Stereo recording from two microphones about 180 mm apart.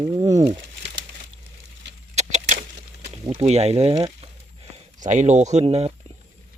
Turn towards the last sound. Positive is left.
turn(degrees=-35)  # may be behind; listen again after turning